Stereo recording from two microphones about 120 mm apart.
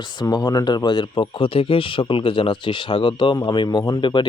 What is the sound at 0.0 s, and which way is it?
Speech, 40° left (ahead or behind).